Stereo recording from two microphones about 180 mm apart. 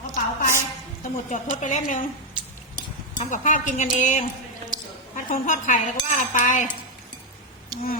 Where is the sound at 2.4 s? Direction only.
30° right (ahead or behind).